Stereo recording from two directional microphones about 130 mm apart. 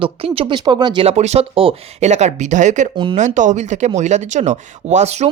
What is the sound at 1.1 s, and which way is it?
Speech, 55° right (ahead or behind).